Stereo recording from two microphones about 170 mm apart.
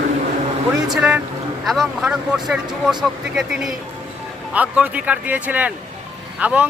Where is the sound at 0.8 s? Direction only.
10° right (ahead or behind).